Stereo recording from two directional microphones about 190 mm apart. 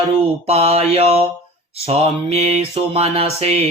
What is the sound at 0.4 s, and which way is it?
Mantra, 30° right (ahead or behind).